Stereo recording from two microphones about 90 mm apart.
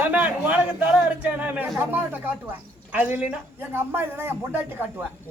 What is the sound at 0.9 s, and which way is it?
A man's voice, 15° right (ahead or behind).